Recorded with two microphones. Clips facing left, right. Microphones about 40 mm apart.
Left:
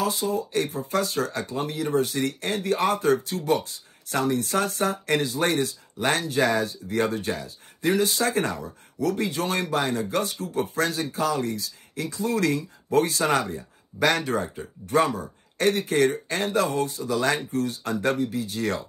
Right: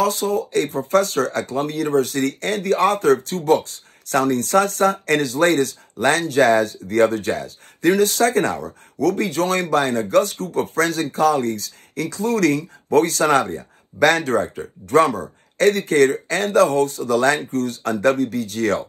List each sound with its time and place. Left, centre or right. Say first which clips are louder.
0.0 s speech: right 6 dB; right